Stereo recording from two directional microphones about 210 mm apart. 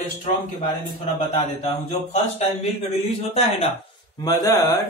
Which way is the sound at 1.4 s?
30° left (ahead or behind).